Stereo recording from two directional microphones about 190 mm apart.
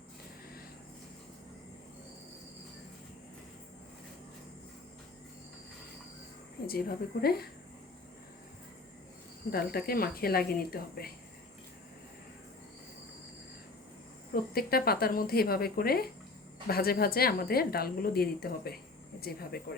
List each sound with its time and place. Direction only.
6.7 s a woman's voice: 55° left (ahead or behind)
9.5 s a woman's voice: 55° left (ahead or behind)
14.5 s a woman's voice: 55° left (ahead or behind)